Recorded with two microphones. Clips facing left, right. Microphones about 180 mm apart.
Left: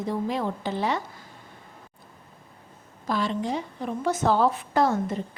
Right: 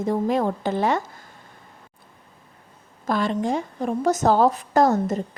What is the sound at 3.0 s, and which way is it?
A woman's voice, 50° right (ahead or behind).